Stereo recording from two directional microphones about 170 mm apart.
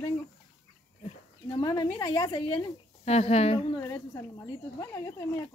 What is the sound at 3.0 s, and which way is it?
Speech, 40° left (ahead or behind).